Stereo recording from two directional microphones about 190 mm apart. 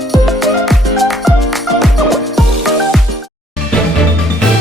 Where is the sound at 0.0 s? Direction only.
Centre (ahead or behind).